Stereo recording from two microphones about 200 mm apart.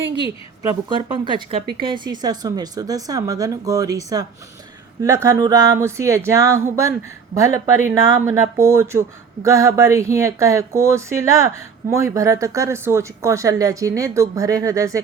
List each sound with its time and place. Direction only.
1.2 s speech: 25° right (ahead or behind)